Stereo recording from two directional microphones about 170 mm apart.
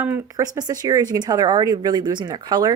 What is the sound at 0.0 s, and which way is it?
Speech, 15° right (ahead or behind).